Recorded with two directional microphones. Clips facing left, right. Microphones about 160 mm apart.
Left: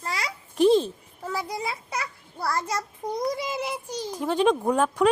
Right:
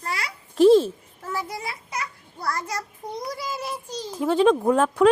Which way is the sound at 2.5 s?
25° left (ahead or behind).